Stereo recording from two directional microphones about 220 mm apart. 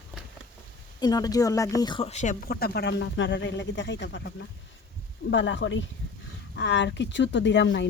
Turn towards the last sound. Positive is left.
turn(degrees=55)  # may be behind; listen again after turning